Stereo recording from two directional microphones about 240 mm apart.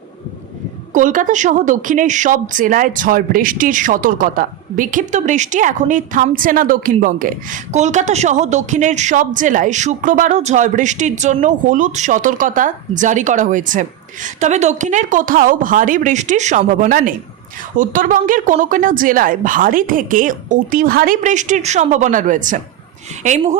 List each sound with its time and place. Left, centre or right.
0.9 s a woman's voice: right